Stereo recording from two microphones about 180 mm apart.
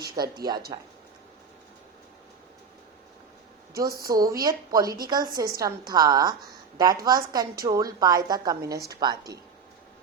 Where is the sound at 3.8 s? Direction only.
55° right (ahead or behind).